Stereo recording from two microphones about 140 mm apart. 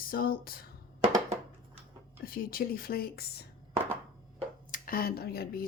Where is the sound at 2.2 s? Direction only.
90° left.